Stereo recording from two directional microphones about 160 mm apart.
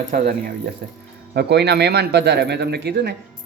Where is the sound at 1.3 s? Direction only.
90° right.